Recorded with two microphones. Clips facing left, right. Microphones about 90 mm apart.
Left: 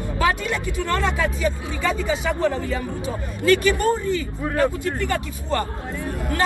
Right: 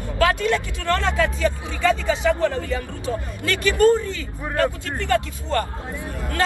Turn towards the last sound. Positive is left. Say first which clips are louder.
# left 1 dB
turn(degrees=20)  # may be behind; listen again after turning